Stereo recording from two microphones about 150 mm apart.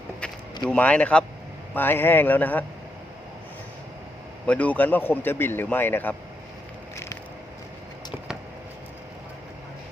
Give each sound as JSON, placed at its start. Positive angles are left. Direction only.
{"t": 0.6, "sound": "a man's voice", "side_deg": 5}
{"t": 4.4, "sound": "a man's voice", "side_deg": 10}
{"t": 6.9, "sound": "a sound", "side_deg": 20}